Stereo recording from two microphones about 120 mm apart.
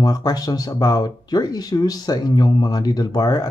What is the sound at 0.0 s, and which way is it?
Speech, 35° left (ahead or behind).